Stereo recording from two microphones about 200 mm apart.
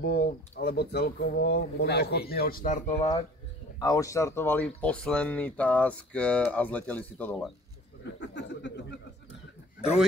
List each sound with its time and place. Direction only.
0.0 s speech: 55° left (ahead or behind); by 3.1 s 35° left (ahead or behind)
3.8 s speech: 15° left (ahead or behind)
8.0 s speech: 60° left (ahead or behind)